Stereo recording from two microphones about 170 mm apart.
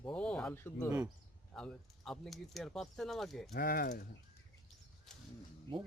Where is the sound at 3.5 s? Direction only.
60° left (ahead or behind).